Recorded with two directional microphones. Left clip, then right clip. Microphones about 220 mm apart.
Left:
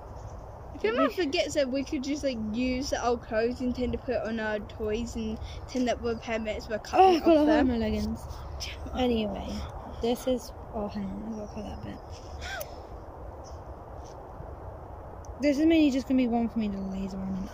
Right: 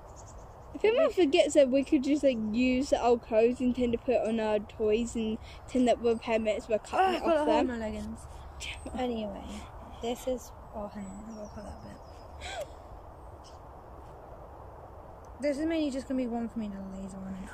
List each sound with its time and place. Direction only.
0.7 s speech: 15° right (ahead or behind)
7.0 s speech: 15° left (ahead or behind)
15.4 s speech: 10° left (ahead or behind)